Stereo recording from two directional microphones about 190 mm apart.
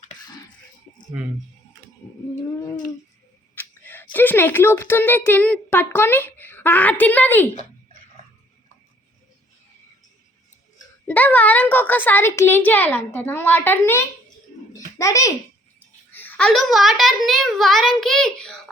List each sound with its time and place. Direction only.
3.5 s speech: 10° left (ahead or behind)
11.0 s a child's voice: 10° left (ahead or behind)
14.7 s a sound: 15° left (ahead or behind)
16.1 s a child's voice: 5° left (ahead or behind)